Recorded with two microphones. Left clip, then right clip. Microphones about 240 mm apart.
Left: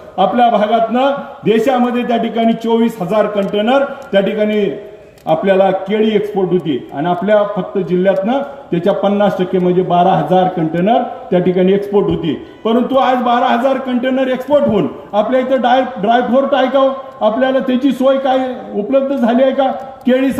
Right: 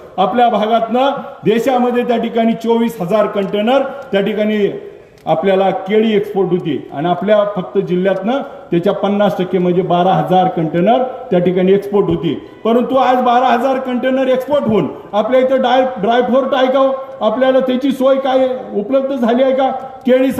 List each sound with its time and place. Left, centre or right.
0.2 s a man's voice: right